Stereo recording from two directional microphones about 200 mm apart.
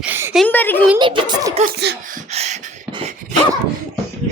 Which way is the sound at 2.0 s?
40° right (ahead or behind).